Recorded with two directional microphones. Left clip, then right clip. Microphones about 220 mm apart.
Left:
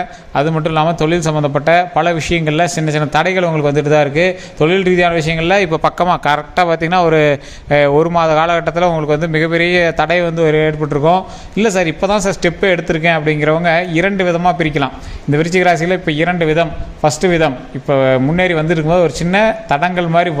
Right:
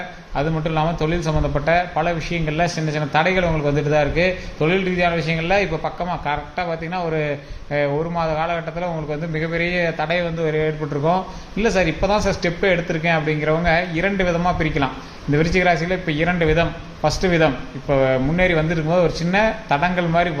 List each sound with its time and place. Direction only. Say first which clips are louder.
0.3 s a man's voice: left 7 dB; 45° left (ahead or behind)